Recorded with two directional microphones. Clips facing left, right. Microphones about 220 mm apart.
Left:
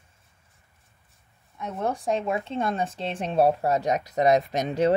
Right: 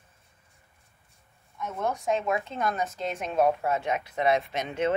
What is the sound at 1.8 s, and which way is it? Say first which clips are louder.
Speech: left 1 dB; 30° left (ahead or behind).